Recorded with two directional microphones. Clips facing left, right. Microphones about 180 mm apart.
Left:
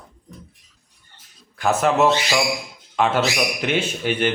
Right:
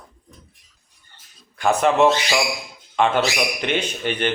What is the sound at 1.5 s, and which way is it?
A man's voice, centre (ahead or behind).